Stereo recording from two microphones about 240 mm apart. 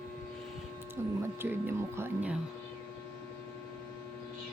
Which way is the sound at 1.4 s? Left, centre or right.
Centre.